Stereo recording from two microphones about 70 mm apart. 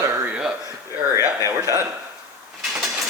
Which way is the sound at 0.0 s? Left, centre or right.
Right.